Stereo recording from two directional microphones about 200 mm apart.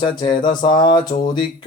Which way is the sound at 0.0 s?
20° left (ahead or behind).